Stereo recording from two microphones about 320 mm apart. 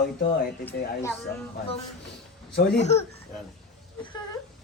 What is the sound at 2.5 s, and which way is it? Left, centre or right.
Speech, left.